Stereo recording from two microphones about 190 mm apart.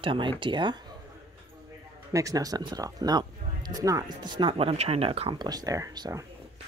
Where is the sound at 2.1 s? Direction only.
20° right (ahead or behind).